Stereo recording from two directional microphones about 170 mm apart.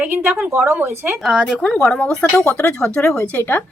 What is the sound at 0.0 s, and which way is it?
A woman's voice, 10° right (ahead or behind).